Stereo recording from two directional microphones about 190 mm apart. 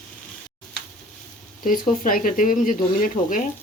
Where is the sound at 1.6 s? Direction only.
45° left (ahead or behind).